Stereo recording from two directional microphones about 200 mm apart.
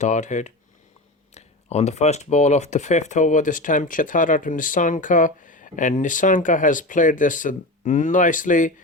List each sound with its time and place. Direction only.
0.0 s speech: 35° left (ahead or behind)